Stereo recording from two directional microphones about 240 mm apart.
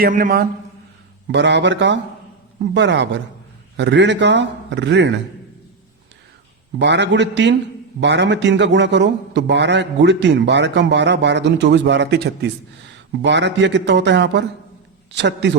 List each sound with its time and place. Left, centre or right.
0.0 s a man's voice: right
1.3 s a man's voice: right
6.7 s a man's voice: right